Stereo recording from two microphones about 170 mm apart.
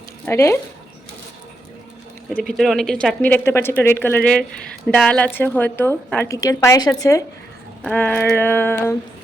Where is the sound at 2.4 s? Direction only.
Centre (ahead or behind); by 7.2 s 20° left (ahead or behind).